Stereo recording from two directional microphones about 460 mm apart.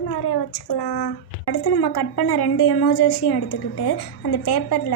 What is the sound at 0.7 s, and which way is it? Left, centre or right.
Speech, left.